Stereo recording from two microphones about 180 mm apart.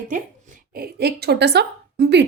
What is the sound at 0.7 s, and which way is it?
A woman's voice, 60° right (ahead or behind).